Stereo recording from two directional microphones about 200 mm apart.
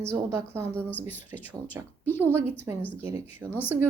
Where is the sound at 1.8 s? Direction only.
10° right (ahead or behind).